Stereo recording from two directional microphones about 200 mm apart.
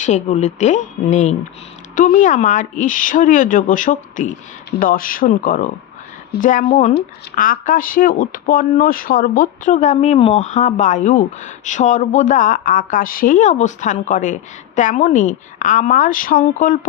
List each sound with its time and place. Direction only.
0.0 s speech: 35° left (ahead or behind)